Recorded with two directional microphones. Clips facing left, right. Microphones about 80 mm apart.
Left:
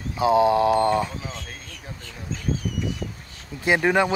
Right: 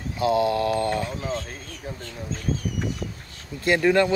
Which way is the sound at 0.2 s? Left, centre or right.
Left.